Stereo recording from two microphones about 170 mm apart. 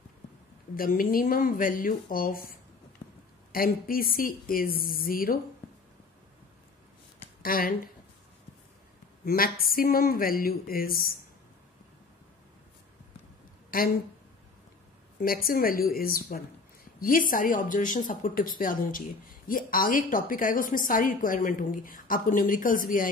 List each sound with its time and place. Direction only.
0.7 s a woman's voice: 55° left (ahead or behind)
3.5 s a woman's voice: 60° left (ahead or behind)
7.4 s a woman's voice: 60° left (ahead or behind)
9.2 s a woman's voice: 60° left (ahead or behind)
13.7 s a woman's voice: 60° left (ahead or behind)
15.1 s a woman's voice: 60° left (ahead or behind)